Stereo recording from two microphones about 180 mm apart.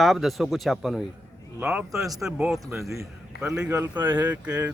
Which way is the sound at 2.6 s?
15° right (ahead or behind).